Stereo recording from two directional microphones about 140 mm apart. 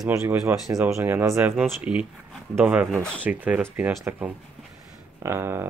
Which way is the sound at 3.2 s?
10° right (ahead or behind).